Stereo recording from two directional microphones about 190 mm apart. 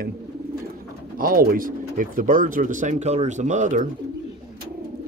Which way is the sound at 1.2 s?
50° right (ahead or behind).